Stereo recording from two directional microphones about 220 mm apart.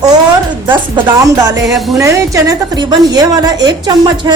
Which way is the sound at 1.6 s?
Centre (ahead or behind).